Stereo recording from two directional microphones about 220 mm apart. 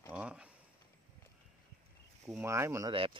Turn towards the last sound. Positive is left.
turn(degrees=-25)  # may be behind; listen again after turning